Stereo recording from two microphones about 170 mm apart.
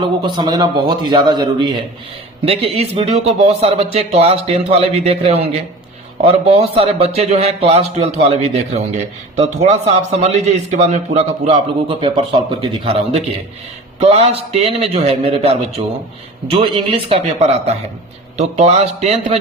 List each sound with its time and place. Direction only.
0.2 s a man's voice: 25° right (ahead or behind)